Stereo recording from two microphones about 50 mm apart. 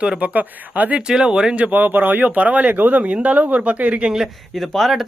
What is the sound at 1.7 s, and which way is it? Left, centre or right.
Speech, right.